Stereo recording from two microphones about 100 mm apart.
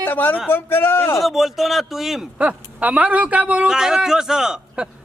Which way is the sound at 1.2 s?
Centre (ahead or behind).